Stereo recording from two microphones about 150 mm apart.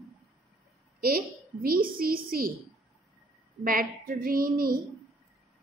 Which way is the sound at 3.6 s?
70° right (ahead or behind).